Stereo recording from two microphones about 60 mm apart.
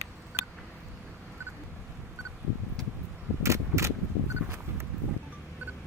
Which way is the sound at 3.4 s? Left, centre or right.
Right.